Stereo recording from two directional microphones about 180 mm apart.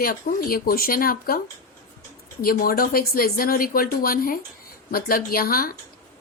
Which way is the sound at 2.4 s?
55° left (ahead or behind).